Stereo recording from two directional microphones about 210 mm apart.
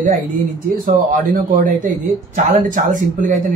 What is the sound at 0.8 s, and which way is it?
Speech, 40° right (ahead or behind).